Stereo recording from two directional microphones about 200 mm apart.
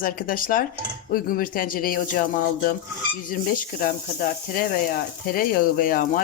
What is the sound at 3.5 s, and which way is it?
A woman's voice, 45° left (ahead or behind).